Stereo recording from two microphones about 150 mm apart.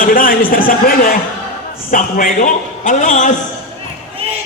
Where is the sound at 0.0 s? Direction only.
70° left (ahead or behind).